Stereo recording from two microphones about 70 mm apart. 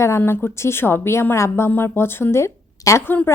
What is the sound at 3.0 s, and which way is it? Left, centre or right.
Speech, left.